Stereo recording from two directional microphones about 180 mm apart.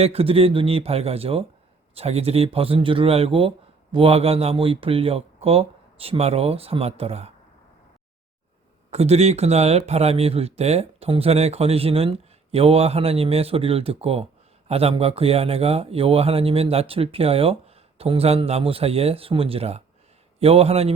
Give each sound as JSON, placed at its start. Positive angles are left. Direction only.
{"t": 0.0, "sound": "speech", "side_deg": -35}
{"t": 8.9, "sound": "speech", "side_deg": -35}